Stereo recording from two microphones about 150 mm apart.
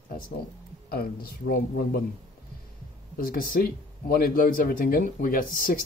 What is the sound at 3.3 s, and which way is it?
Speech, 75° left (ahead or behind).